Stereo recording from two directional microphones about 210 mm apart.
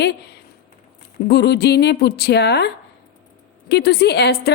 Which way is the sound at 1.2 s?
55° left (ahead or behind).